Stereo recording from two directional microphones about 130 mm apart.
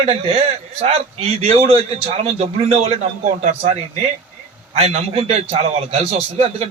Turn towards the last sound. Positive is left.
turn(degrees=-55)  # may be behind; listen again after turning